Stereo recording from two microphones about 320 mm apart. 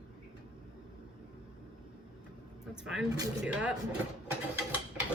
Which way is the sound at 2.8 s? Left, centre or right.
Centre.